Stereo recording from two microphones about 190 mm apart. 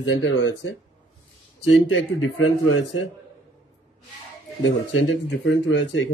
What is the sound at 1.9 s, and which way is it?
Speech, 90° left.